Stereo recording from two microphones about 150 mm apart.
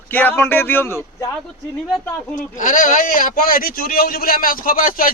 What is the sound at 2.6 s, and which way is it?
A man's voice, 60° left (ahead or behind).